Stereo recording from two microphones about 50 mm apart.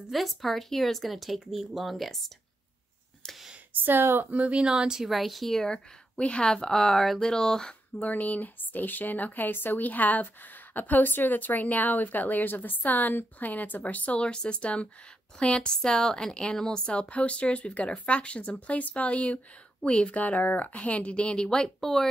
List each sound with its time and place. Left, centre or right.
0.1 s speech: centre
3.7 s speech: right
4.3 s speech: right
5.0 s a woman's voice: centre
8.0 s a woman's voice: left
20.2 s speech: left
21.5 s a woman's voice: centre